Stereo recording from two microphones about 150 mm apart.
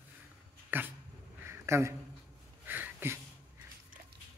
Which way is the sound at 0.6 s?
10° right (ahead or behind).